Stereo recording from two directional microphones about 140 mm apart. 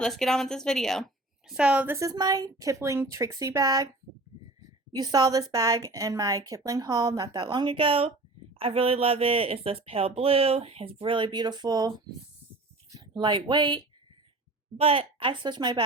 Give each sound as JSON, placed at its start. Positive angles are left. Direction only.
{"t": 0.0, "sound": "a woman's voice", "side_deg": 5}
{"t": 4.9, "sound": "a woman's voice", "side_deg": -30}
{"t": 12.9, "sound": "a woman's voice", "side_deg": -30}